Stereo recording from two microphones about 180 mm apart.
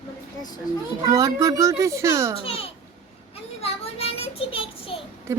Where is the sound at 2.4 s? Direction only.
30° left (ahead or behind).